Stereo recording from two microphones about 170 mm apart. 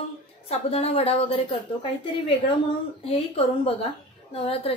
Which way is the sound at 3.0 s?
35° left (ahead or behind).